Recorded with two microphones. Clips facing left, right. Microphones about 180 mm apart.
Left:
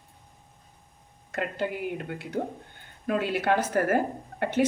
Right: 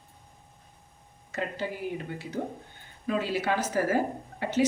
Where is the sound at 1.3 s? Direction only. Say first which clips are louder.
Left 3 dB; 60° left (ahead or behind).